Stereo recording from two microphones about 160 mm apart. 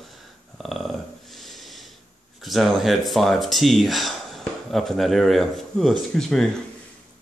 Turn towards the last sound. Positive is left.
turn(degrees=5)  # may be behind; listen again after turning